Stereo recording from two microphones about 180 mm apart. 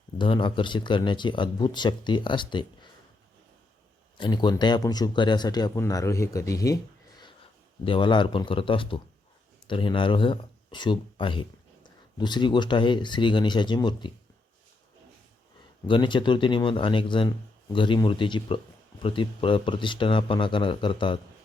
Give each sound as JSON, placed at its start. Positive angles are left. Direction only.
{"t": 0.2, "sound": "speech", "side_deg": 25}
{"t": 4.2, "sound": "speech", "side_deg": 25}
{"t": 7.9, "sound": "speech", "side_deg": 25}
{"t": 15.9, "sound": "speech", "side_deg": 25}